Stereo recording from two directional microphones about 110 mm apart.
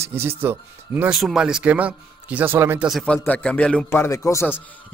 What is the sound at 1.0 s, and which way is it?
A man's voice, 5° right (ahead or behind).